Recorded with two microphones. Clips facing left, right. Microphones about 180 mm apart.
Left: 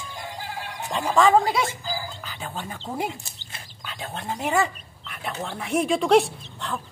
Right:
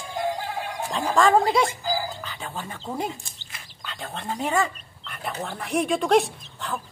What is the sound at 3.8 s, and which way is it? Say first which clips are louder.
Speech: even; 5° left (ahead or behind).